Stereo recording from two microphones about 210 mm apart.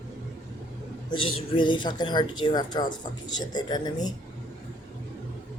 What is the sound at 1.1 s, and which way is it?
Speech, 25° left (ahead or behind).